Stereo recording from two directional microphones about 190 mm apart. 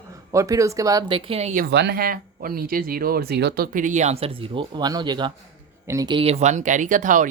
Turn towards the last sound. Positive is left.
turn(degrees=-45)  # may be behind; listen again after turning